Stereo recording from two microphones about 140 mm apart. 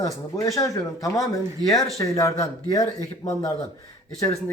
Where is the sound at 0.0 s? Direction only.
25° left (ahead or behind).